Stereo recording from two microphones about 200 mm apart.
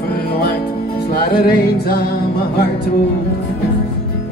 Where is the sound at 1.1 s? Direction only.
50° left (ahead or behind).